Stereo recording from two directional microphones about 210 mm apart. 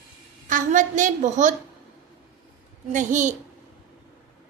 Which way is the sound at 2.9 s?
35° right (ahead or behind).